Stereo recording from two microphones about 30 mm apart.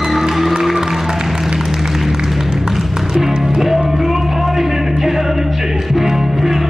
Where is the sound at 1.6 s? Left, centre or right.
Centre.